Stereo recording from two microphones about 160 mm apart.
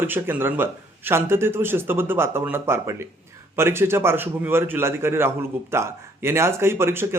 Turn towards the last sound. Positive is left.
turn(degrees=-15)  # may be behind; listen again after turning